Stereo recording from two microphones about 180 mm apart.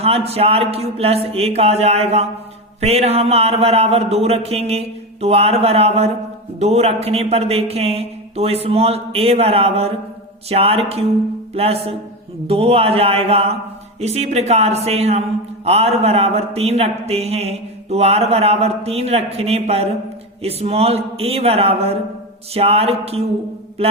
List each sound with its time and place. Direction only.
0.0 s a man's voice: 35° right (ahead or behind)